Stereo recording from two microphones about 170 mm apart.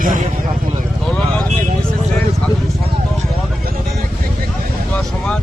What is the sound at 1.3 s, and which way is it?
Vehicle, 5° left (ahead or behind).